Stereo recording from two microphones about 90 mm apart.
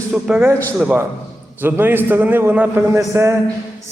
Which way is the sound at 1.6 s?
25° right (ahead or behind).